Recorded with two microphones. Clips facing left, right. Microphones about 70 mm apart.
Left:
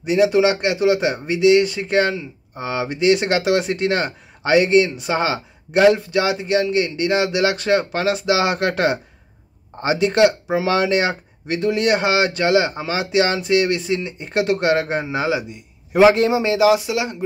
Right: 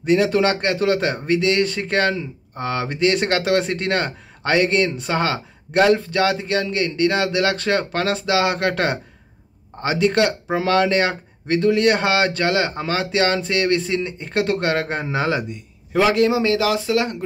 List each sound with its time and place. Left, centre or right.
0.0 s speech: centre
15.9 s speech: left